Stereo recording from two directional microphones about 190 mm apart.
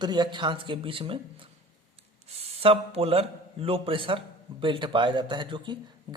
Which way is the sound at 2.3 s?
35° right (ahead or behind).